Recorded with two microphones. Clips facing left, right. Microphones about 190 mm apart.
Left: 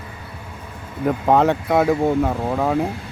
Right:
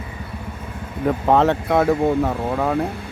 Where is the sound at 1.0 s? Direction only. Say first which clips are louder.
Even; centre (ahead or behind).